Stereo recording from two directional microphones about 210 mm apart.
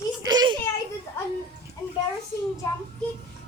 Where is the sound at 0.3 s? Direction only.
20° right (ahead or behind).